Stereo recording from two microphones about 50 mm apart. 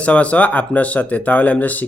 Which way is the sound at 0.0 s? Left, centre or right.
Left.